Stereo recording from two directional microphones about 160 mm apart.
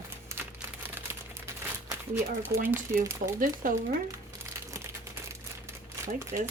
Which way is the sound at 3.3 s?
60° right (ahead or behind).